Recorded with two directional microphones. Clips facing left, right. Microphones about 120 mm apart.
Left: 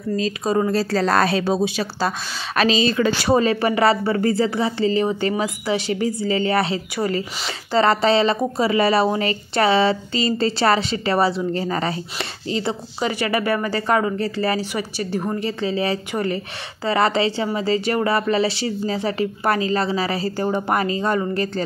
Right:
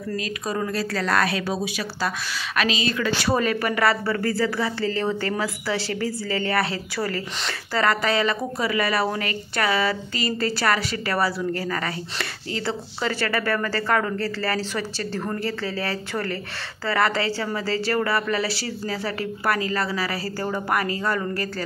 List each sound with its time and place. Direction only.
0.2 s a woman's voice: 30° left (ahead or behind)